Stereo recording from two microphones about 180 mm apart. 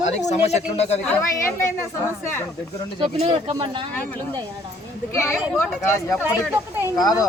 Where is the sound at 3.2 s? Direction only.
30° right (ahead or behind).